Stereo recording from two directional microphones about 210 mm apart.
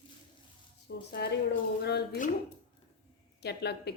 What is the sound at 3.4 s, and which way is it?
Speech, 50° left (ahead or behind).